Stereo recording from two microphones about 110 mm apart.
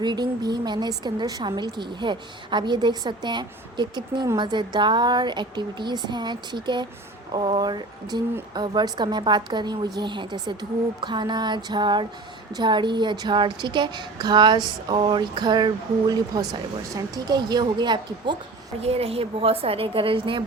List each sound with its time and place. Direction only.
0.0 s a woman's voice: 40° right (ahead or behind)
18.8 s a woman's voice: 65° right (ahead or behind); by 20.4 s 50° right (ahead or behind)